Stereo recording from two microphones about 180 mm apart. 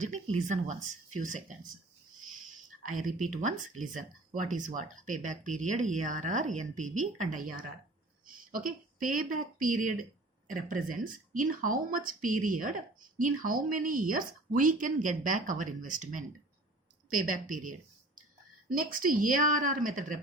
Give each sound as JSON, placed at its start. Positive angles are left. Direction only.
{"t": 0.0, "sound": "speech", "side_deg": -40}
{"t": 2.8, "sound": "speech", "side_deg": -50}